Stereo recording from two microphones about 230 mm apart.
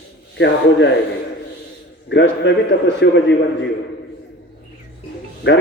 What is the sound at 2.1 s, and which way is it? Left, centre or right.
A man's voice, left.